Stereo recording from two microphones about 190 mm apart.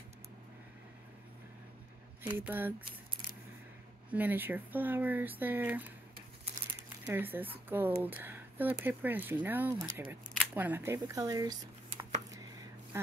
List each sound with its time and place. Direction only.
2.3 s speech: 10° right (ahead or behind)
4.1 s speech: 10° right (ahead or behind)
7.1 s speech: 10° right (ahead or behind)
12.9 s a sound: 15° right (ahead or behind)